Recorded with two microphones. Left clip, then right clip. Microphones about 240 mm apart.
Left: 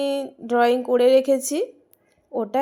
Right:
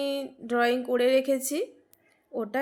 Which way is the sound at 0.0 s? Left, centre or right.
Centre.